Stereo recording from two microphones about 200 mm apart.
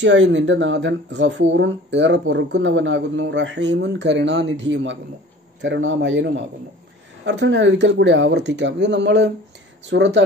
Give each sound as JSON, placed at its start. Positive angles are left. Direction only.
{"t": 0.0, "sound": "a man's voice", "side_deg": -65}